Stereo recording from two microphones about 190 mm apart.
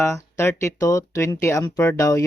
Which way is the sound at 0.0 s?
15° left (ahead or behind).